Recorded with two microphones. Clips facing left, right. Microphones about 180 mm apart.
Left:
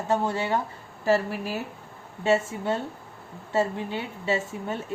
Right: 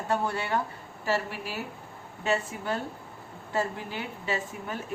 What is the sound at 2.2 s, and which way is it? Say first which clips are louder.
Speech: left 6 dB; 25° left (ahead or behind).